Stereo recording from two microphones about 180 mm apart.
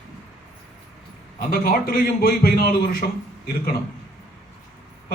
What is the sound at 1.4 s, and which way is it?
A man's voice, 55° left (ahead or behind).